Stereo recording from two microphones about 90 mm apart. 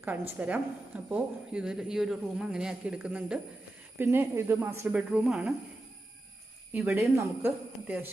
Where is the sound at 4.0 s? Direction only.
25° right (ahead or behind).